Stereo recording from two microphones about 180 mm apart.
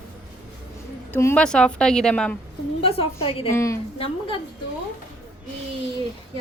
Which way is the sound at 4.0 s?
30° left (ahead or behind).